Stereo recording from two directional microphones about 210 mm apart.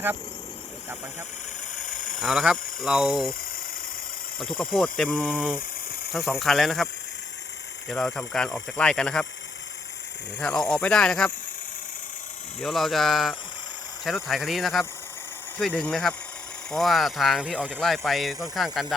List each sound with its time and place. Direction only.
1.7 s vehicle: 40° left (ahead or behind)
2.2 s speech: 5° right (ahead or behind)
4.4 s speech: centre (ahead or behind)
7.9 s speech: centre (ahead or behind)
10.4 s speech: 5° left (ahead or behind)
12.5 s speech: centre (ahead or behind)